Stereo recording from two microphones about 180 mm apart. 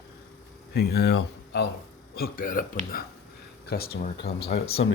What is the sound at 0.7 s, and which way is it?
Speech, 65° left (ahead or behind).